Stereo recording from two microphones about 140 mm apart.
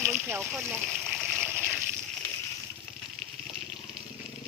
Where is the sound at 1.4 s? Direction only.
15° right (ahead or behind).